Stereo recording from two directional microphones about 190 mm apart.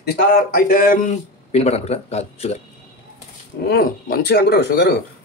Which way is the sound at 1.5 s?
35° left (ahead or behind).